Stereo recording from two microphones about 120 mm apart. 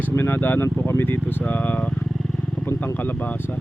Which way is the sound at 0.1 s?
20° left (ahead or behind).